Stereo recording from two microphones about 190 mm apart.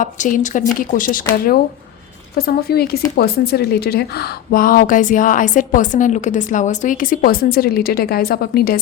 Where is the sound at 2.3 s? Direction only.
55° left (ahead or behind).